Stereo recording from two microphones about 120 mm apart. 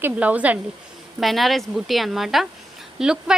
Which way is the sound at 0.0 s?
10° right (ahead or behind).